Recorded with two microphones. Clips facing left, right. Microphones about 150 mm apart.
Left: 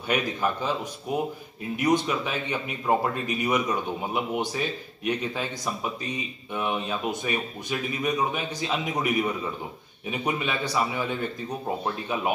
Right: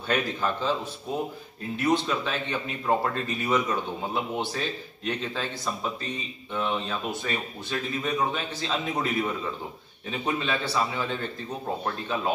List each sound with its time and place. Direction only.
0.1 s speech: 15° left (ahead or behind)